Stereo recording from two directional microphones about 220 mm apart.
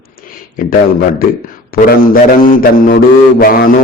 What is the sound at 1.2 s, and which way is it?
A man's voice, 40° left (ahead or behind).